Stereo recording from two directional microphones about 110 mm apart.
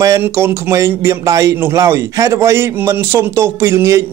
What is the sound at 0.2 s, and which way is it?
Speech, 25° right (ahead or behind).